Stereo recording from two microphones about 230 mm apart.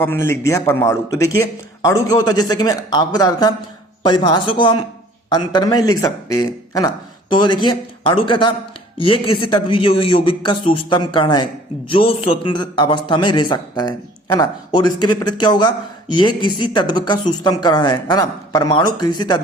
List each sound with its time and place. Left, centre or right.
0.0 s a man's voice: centre